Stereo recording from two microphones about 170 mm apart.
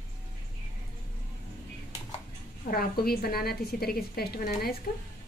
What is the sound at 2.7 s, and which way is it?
A woman's voice, 60° left (ahead or behind).